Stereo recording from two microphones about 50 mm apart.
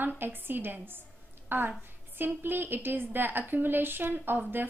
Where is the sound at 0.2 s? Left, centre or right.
Right.